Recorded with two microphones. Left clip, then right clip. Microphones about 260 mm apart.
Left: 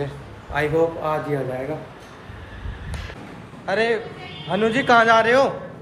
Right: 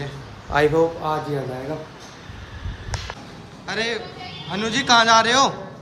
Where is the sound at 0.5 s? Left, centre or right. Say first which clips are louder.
Right 3 dB; right.